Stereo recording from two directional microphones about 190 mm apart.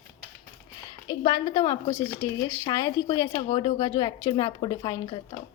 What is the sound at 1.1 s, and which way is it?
Speech, 25° left (ahead or behind).